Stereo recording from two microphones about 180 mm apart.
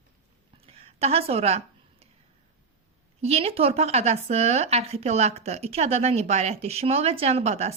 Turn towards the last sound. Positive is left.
turn(degrees=-35)  # may be behind; listen again after turning